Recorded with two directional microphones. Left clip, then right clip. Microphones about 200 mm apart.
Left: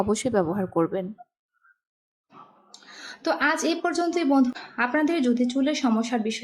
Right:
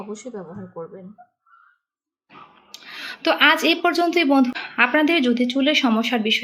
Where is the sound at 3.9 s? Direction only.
Centre (ahead or behind).